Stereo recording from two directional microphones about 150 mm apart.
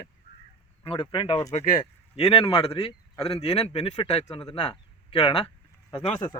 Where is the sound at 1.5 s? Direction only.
60° left (ahead or behind).